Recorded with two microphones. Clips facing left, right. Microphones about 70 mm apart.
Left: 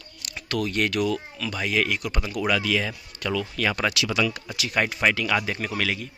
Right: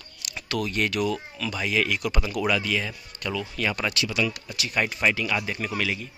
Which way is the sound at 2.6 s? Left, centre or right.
Left.